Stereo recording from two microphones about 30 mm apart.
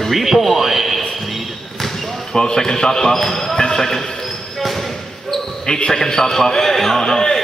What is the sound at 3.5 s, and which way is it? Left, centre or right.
Speech, left.